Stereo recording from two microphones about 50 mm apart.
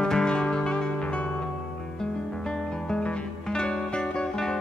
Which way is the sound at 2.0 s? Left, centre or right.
Centre.